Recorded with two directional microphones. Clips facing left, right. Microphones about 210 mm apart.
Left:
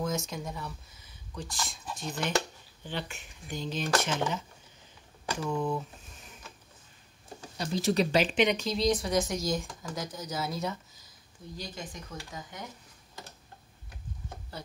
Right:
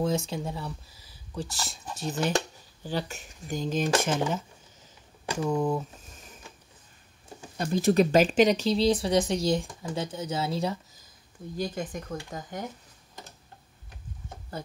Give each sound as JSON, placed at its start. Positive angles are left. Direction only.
{"t": 0.0, "sound": "speech", "side_deg": -30}
{"t": 5.5, "sound": "speech", "side_deg": -40}
{"t": 7.5, "sound": "speech", "side_deg": -50}
{"t": 11.5, "sound": "speech", "side_deg": -55}
{"t": 14.5, "sound": "speech", "side_deg": -50}